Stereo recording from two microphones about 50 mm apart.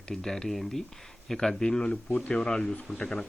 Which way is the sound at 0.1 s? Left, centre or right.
Centre.